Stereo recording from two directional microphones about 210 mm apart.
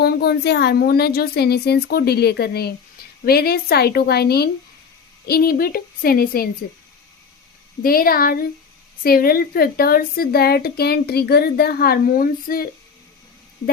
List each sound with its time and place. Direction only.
0.0 s speech: 50° left (ahead or behind)
7.8 s speech: 45° left (ahead or behind)